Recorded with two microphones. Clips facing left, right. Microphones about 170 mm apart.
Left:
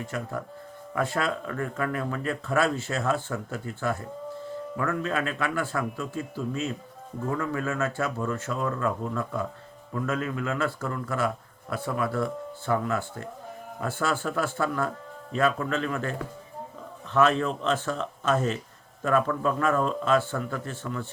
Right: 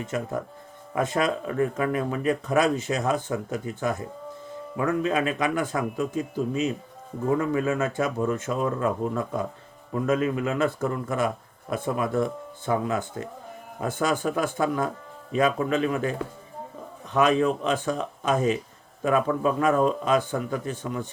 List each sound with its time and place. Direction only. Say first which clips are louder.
0.0 s speech: right 4 dB; 20° right (ahead or behind)